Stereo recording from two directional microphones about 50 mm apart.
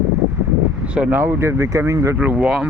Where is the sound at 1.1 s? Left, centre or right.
Right.